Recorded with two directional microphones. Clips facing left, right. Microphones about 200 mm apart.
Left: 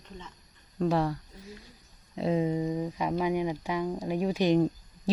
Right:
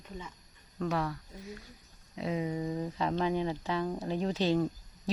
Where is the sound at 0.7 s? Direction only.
30° left (ahead or behind).